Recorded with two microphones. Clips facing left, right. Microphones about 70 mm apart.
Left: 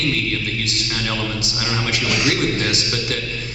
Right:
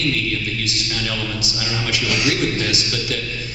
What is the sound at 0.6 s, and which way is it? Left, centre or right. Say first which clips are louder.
A man's voice: left 1 dB; left.